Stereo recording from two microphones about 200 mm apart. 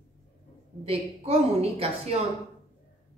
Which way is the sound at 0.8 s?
30° right (ahead or behind).